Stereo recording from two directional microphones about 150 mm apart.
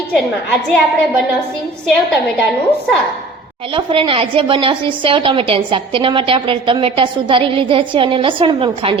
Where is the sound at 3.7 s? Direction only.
35° right (ahead or behind).